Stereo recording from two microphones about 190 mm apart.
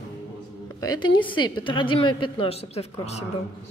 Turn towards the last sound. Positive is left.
turn(degrees=35)  # may be behind; listen again after turning